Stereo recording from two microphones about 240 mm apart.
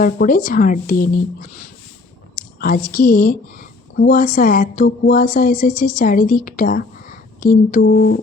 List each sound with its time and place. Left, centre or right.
0.0 s a woman's voice: left
2.3 s a woman's voice: left